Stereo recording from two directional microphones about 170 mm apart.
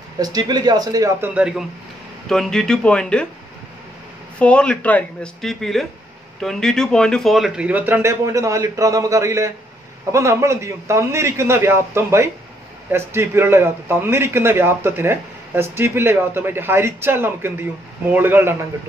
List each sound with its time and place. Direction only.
0.2 s speech: 25° right (ahead or behind)
1.3 s a woman's voice: 5° right (ahead or behind)
4.4 s a woman's voice: 5° left (ahead or behind); by 18.5 s 10° right (ahead or behind)